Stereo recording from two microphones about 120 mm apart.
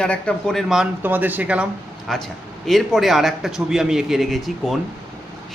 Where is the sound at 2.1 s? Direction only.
Centre (ahead or behind).